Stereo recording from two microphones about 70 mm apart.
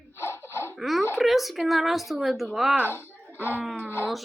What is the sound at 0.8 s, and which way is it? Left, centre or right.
A woman's voice, centre.